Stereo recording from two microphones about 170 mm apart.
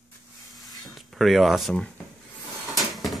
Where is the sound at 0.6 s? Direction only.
Centre (ahead or behind).